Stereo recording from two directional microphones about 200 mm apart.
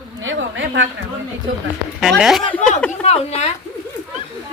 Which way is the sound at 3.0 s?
30° left (ahead or behind).